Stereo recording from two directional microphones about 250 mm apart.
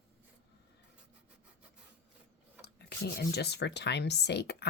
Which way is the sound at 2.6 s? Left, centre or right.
Left.